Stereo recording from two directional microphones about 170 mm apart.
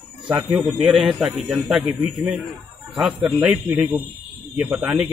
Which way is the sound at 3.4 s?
5° right (ahead or behind).